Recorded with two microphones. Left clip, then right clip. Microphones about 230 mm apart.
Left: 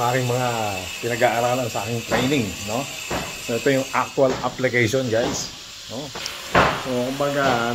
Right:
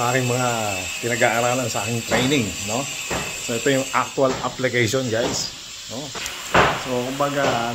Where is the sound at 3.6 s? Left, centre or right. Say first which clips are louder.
Even; centre.